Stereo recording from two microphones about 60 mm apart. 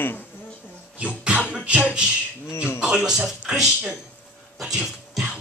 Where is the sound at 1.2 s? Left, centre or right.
Centre.